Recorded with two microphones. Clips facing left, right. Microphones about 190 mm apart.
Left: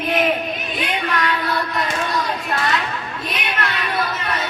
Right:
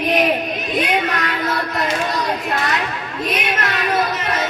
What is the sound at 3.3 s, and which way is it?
Music, 45° right (ahead or behind).